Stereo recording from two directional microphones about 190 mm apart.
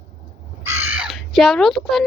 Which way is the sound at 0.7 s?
10° right (ahead or behind).